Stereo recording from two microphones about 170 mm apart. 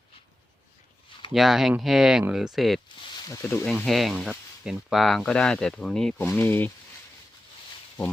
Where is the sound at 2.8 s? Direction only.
25° left (ahead or behind).